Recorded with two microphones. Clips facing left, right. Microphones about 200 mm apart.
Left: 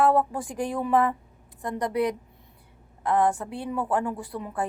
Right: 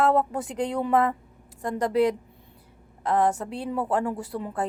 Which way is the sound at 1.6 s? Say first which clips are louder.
Right 3 dB; 25° right (ahead or behind).